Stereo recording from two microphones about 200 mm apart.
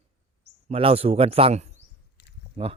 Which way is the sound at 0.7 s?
30° right (ahead or behind).